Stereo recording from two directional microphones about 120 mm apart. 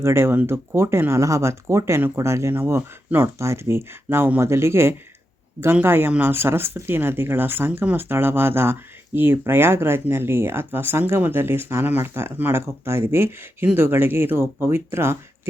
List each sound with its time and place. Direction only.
0.0 s speech: 20° right (ahead or behind)